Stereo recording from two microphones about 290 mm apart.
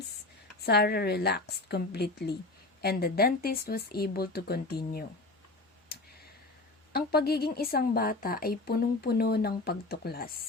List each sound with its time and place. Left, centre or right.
0.6 s a woman's voice: left
6.9 s a woman's voice: left